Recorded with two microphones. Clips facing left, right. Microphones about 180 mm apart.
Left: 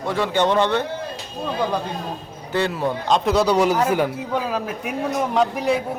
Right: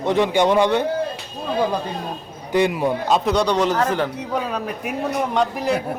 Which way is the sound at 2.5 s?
15° right (ahead or behind).